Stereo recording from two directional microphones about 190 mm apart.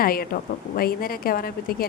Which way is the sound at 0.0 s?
50° left (ahead or behind).